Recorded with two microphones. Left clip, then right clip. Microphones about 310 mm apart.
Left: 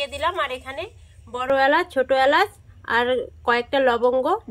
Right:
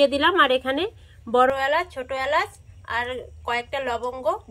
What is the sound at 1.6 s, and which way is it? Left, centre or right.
Speech, left.